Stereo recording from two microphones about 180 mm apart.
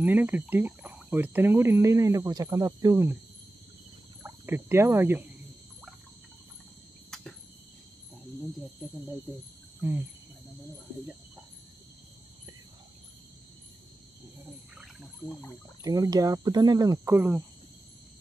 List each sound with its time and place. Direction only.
0.0 s speech: 10° right (ahead or behind)
4.2 s speech: 10° right (ahead or behind)
7.1 s cricket: 5° left (ahead or behind)
9.8 s speech: 10° right (ahead or behind)
14.4 s wild animals: centre (ahead or behind)
15.8 s speech: 20° right (ahead or behind)